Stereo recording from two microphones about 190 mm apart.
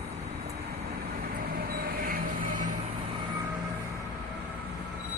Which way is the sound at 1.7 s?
50° right (ahead or behind).